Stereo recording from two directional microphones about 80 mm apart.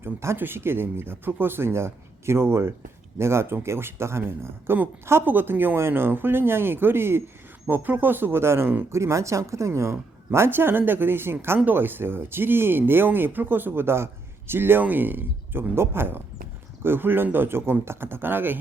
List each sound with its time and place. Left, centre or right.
0.0 s speech: right